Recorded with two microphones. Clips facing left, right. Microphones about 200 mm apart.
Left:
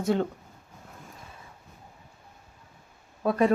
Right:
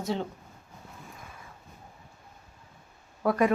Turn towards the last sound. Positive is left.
turn(degrees=25)  # may be behind; listen again after turning